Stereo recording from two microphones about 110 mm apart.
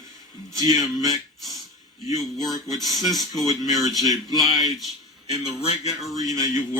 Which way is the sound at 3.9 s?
30° right (ahead or behind).